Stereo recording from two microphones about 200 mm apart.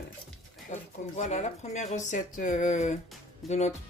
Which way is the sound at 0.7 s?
35° left (ahead or behind).